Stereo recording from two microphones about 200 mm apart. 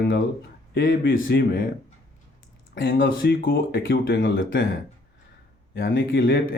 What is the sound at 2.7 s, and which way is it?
Speech, 50° left (ahead or behind).